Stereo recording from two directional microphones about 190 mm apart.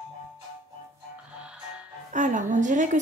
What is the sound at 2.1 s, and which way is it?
Speech, 40° right (ahead or behind).